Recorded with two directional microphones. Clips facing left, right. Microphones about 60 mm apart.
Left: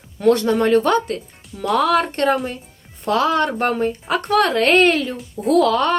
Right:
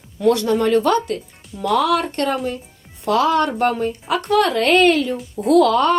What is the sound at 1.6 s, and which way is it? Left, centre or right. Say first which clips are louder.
Speech: even; left.